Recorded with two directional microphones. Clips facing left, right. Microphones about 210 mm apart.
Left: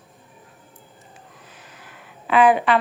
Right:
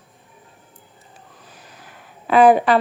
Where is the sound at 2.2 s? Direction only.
40° right (ahead or behind).